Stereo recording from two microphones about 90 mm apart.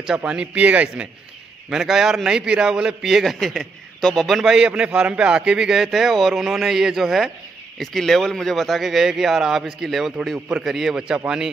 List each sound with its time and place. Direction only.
0.2 s speech: 15° right (ahead or behind)
1.7 s a man's voice: 5° right (ahead or behind)